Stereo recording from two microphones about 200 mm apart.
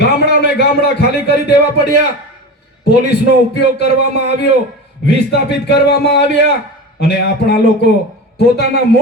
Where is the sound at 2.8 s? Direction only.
55° left (ahead or behind).